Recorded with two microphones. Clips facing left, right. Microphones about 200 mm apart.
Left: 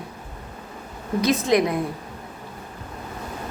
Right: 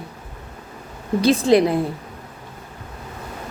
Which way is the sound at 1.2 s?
30° right (ahead or behind).